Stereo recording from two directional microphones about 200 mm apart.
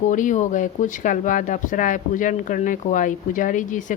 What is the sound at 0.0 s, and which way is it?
A woman's voice, 40° left (ahead or behind).